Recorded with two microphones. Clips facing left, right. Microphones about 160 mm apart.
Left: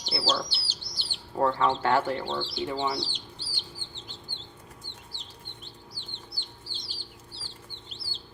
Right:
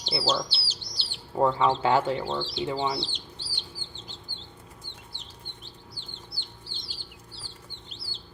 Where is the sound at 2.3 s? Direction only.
20° right (ahead or behind).